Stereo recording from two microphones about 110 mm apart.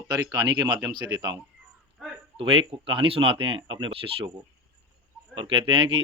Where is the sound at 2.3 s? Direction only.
55° right (ahead or behind).